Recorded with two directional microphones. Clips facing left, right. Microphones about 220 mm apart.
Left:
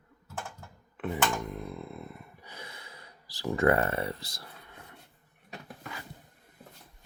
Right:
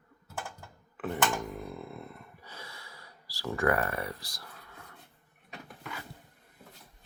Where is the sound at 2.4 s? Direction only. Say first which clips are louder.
Left 1 dB; 15° left (ahead or behind).